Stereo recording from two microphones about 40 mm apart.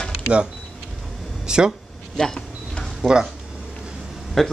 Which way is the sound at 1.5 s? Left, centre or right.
Centre.